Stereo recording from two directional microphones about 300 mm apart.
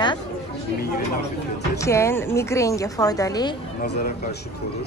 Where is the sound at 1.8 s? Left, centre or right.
Centre.